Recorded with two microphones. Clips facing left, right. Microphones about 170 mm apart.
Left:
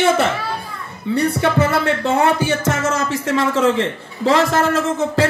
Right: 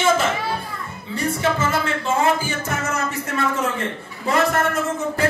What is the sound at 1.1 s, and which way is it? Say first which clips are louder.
Music: left 5 dB; 65° left (ahead or behind).